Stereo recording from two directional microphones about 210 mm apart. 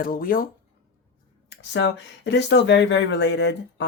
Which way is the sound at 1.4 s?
60° left (ahead or behind).